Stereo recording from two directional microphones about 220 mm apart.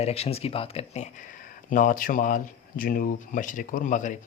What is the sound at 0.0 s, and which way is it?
Speech, 25° left (ahead or behind).